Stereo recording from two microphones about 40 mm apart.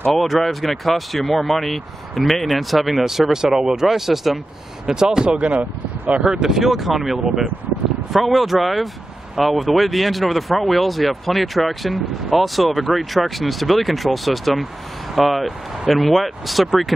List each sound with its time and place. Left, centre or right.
0.2 s speech: centre
4.8 s speech: centre
5.4 s speech: right
6.2 s speech: centre